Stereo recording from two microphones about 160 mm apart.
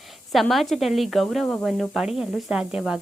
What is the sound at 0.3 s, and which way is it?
A woman's voice, centre (ahead or behind).